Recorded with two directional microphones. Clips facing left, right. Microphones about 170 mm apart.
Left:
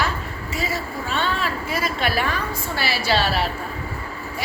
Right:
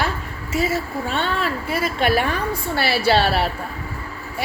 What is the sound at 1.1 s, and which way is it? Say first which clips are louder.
A woman's voice: even; 55° right (ahead or behind).